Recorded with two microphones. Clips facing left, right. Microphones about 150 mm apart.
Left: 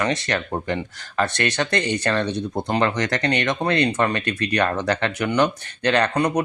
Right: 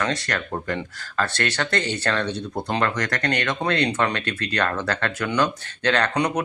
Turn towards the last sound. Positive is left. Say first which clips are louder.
# left 3 dB
turn(degrees=10)  # may be behind; listen again after turning